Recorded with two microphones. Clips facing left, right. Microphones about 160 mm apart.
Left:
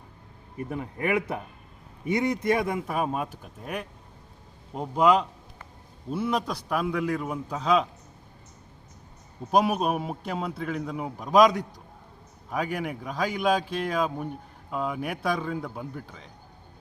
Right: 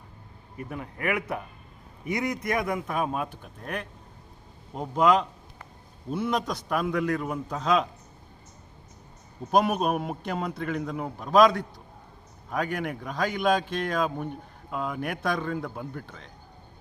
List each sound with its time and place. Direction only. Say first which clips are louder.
0.5 s a man's voice: left 3 dB; 30° left (ahead or behind)
2.8 s a man's voice: left 1 dB; 5° left (ahead or behind)
9.5 s a man's voice: even; 5° left (ahead or behind)